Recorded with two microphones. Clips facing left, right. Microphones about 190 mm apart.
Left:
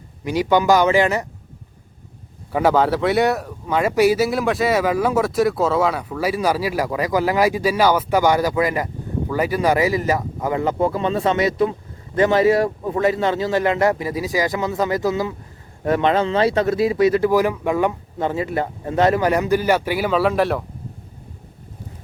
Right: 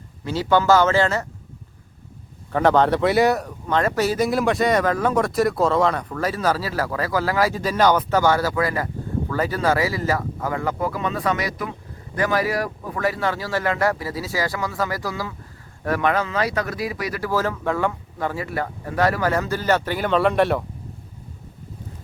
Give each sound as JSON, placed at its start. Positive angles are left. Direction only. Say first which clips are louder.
{"t": 0.3, "sound": "speech", "louder": "left 1 dB", "side_deg": 15}
{"t": 2.5, "sound": "speech", "louder": "even", "side_deg": 10}
{"t": 4.3, "sound": "speech", "louder": "even", "side_deg": 0}